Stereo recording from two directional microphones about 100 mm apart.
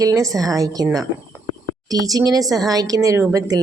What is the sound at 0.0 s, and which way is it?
Speech, 35° right (ahead or behind).